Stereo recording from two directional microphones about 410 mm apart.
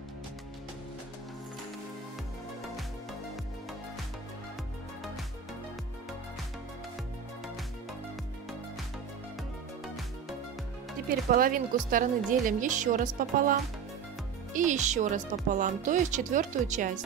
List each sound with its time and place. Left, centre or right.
11.1 s speech: right